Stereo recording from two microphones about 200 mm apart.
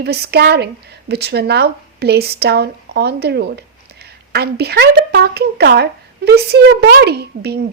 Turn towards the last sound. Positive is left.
turn(degrees=-55)  # may be behind; listen again after turning